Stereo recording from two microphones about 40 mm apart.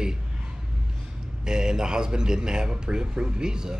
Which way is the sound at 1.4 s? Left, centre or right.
Centre.